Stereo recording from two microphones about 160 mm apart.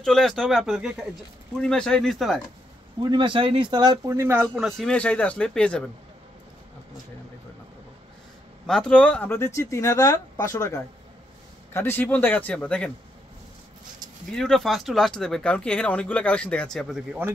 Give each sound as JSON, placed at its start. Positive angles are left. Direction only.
{"t": 0.0, "sound": "speech", "side_deg": 0}
{"t": 3.0, "sound": "speech", "side_deg": -30}
{"t": 4.6, "sound": "speech", "side_deg": 5}
{"t": 8.6, "sound": "speech", "side_deg": 5}
{"t": 14.3, "sound": "speech", "side_deg": 5}